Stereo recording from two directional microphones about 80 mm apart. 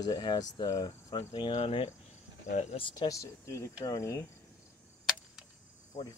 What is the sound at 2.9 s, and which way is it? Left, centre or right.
Speech, left.